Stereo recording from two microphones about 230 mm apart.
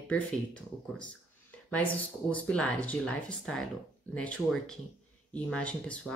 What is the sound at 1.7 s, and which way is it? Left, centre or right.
Speech, centre.